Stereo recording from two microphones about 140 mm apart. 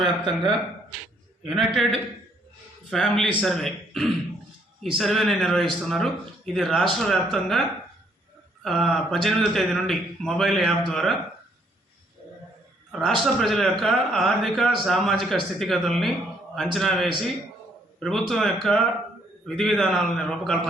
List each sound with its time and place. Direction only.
0.0 s speech: centre (ahead or behind)
2.9 s speech: centre (ahead or behind)
8.6 s speech: centre (ahead or behind)
12.9 s speech: centre (ahead or behind)